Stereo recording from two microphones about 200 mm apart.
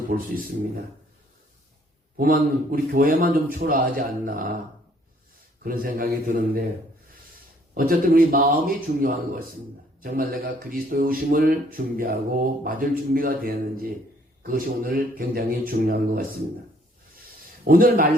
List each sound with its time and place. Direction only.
0.1 s speech: 45° right (ahead or behind)
2.1 s speech: 45° right (ahead or behind)
5.6 s speech: 45° right (ahead or behind)
7.7 s speech: 45° right (ahead or behind)
17.7 s speech: 45° right (ahead or behind)